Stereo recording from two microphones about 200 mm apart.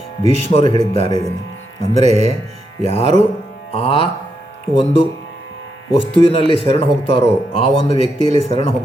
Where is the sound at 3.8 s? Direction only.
30° left (ahead or behind).